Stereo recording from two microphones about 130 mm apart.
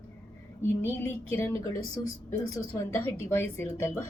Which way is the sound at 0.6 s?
15° left (ahead or behind).